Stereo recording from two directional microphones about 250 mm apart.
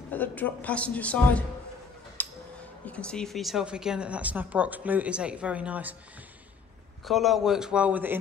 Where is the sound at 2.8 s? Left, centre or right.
Centre.